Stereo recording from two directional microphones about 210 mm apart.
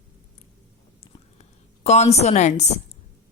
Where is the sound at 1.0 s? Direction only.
30° left (ahead or behind).